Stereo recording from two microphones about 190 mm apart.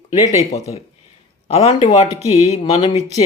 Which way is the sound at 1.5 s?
35° left (ahead or behind).